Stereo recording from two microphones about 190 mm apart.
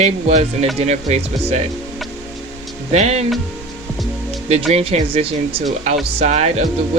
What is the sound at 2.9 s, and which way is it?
Speech, 35° right (ahead or behind).